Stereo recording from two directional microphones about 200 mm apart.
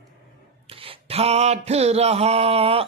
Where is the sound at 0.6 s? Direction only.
30° right (ahead or behind).